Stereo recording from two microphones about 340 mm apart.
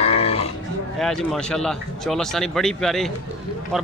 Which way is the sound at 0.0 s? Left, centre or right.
Centre.